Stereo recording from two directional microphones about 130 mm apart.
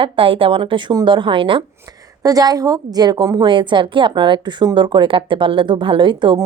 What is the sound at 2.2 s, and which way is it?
A woman's voice, 30° right (ahead or behind).